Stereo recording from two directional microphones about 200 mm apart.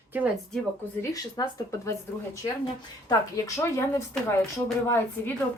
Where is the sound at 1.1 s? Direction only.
15° left (ahead or behind).